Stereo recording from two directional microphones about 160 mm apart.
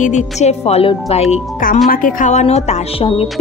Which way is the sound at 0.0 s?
45° left (ahead or behind).